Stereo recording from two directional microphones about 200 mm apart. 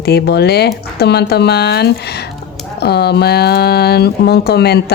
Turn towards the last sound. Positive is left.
turn(degrees=55)  # may be behind; listen again after turning